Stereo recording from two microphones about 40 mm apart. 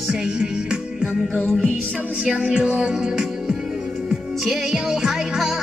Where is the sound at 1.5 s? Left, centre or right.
Centre.